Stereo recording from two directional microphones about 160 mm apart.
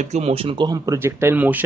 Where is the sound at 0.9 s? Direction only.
15° right (ahead or behind).